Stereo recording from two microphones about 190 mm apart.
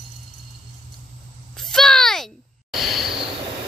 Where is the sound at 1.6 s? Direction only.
5° left (ahead or behind).